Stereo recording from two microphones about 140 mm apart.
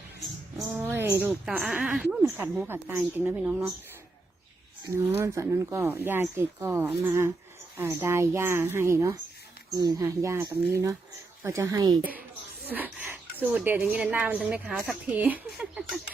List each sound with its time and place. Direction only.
0.9 s a woman's voice: 15° right (ahead or behind)
4.9 s a woman's voice: 20° right (ahead or behind)
12.6 s speech: 10° right (ahead or behind)